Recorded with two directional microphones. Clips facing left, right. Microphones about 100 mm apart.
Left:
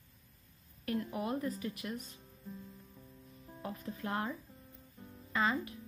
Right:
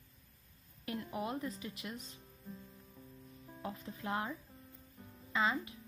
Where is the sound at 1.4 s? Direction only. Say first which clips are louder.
Left 4 dB; 20° right (ahead or behind).